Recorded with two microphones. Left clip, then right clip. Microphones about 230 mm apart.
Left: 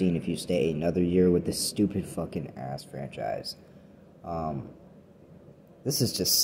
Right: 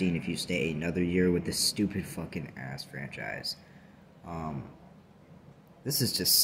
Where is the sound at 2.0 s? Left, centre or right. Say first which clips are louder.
Left 5 dB; centre.